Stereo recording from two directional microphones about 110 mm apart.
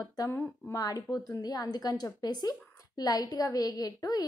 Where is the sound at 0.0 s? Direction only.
35° left (ahead or behind).